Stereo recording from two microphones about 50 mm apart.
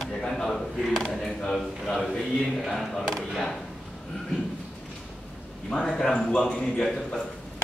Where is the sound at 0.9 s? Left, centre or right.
Centre.